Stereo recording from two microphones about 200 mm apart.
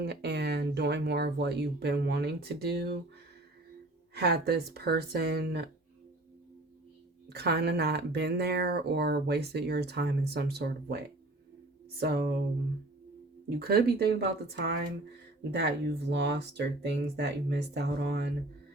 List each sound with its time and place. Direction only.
0.0 s speech: 55° right (ahead or behind)
4.1 s speech: 55° right (ahead or behind)
7.3 s speech: 55° right (ahead or behind)
13.6 s speech: 50° right (ahead or behind)